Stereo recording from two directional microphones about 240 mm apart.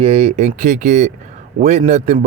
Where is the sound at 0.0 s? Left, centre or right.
Right.